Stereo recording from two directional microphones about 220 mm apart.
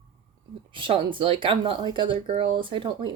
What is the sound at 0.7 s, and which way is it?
Speech, 25° right (ahead or behind).